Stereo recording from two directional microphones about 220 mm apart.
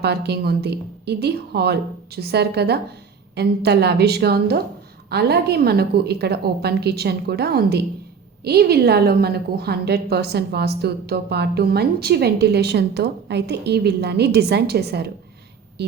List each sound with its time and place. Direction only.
0.0 s a woman's voice: 50° right (ahead or behind)